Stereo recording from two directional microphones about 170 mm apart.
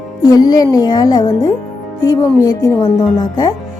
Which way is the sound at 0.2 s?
20° left (ahead or behind).